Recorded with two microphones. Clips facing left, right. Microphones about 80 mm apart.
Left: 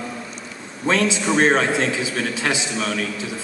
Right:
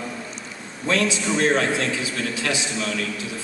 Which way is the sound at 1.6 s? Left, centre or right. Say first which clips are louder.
Left 2 dB; left.